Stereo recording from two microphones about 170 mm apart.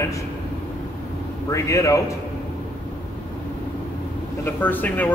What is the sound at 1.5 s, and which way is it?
Speech, 20° left (ahead or behind).